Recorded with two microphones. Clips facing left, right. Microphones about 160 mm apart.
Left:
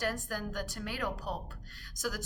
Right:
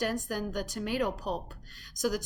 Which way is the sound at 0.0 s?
15° right (ahead or behind).